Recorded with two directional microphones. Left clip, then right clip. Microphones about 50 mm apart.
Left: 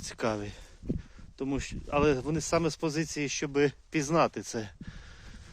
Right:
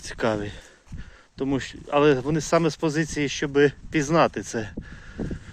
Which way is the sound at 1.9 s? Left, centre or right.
Left.